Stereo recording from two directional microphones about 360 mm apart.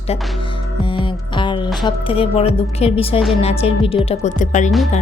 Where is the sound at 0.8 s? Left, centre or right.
Centre.